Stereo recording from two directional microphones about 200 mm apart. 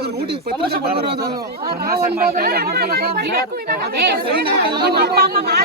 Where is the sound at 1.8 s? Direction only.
50° right (ahead or behind).